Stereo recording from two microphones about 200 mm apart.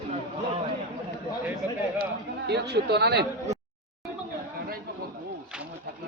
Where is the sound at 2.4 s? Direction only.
55° right (ahead or behind).